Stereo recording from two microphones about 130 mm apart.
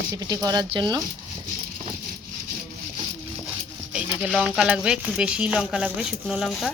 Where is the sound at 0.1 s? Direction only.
30° right (ahead or behind).